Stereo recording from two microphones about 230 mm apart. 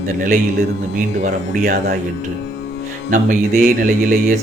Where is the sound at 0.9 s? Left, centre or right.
Right.